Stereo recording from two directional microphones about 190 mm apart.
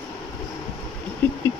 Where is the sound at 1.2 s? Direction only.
10° left (ahead or behind).